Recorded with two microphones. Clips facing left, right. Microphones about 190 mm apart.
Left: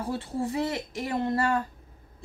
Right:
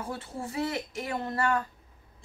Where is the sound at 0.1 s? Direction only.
30° left (ahead or behind).